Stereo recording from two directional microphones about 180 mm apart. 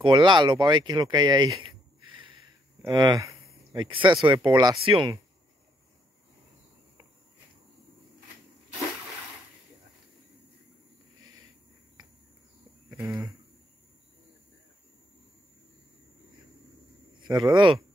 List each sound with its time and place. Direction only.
0.0 s speech: 25° right (ahead or behind)
12.9 s a sound: 15° right (ahead or behind)
17.2 s speech: 25° right (ahead or behind)